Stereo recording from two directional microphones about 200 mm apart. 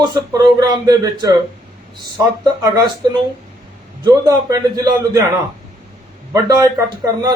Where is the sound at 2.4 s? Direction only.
20° right (ahead or behind).